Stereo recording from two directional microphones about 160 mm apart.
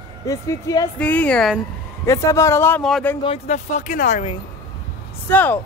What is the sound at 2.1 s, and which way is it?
A woman's voice, 20° left (ahead or behind).